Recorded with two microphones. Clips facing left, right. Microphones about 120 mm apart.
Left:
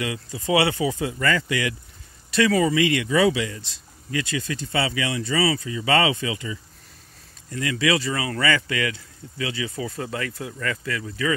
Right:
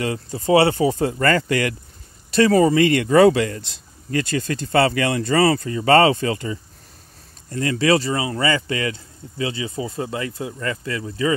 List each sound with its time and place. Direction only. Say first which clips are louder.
0.0 s speech: right 5 dB; 35° right (ahead or behind)
2.3 s speech: right 5 dB; 40° right (ahead or behind)
7.5 s speech: right 5 dB; 35° right (ahead or behind)